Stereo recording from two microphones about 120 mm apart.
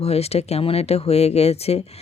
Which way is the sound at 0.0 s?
60° left (ahead or behind).